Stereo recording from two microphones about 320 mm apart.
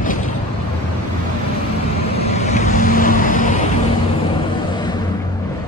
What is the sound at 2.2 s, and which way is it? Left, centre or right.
Vehicle, centre.